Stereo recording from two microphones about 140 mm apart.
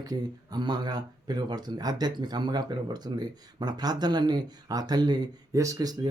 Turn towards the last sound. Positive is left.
turn(degrees=-30)  # may be behind; listen again after turning